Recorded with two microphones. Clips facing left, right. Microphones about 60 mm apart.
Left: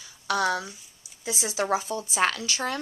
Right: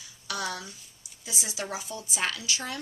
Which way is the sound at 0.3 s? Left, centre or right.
Left.